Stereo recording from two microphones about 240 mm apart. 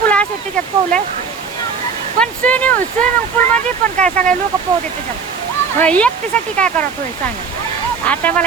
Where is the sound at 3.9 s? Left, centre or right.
Right.